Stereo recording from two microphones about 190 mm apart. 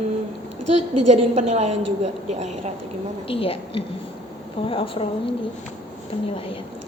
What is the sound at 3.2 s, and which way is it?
A woman's voice, 30° left (ahead or behind).